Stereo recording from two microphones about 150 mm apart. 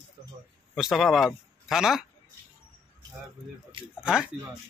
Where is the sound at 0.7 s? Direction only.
Centre (ahead or behind).